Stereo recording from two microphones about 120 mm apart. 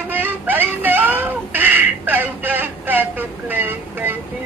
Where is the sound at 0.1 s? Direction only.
15° right (ahead or behind).